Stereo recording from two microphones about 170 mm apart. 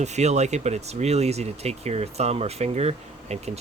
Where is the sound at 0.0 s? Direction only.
40° right (ahead or behind).